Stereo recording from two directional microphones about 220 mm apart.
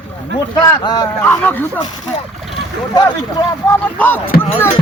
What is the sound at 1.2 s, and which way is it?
Speech, 10° left (ahead or behind).